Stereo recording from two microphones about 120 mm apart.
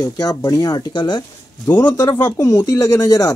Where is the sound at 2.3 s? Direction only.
30° left (ahead or behind).